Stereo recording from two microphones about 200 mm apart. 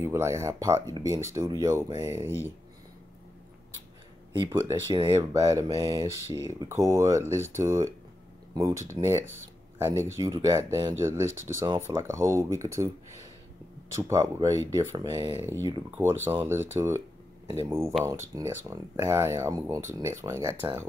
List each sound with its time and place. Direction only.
0.0 s speech: 15° right (ahead or behind)
4.5 s speech: 15° right (ahead or behind)
13.9 s speech: 15° right (ahead or behind)